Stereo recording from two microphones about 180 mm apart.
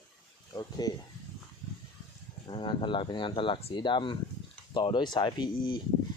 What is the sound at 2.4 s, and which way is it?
Speech, 25° left (ahead or behind).